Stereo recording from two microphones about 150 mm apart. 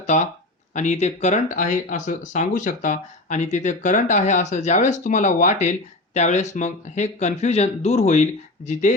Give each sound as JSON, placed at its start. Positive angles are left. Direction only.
{"t": 0.0, "sound": "speech", "side_deg": 50}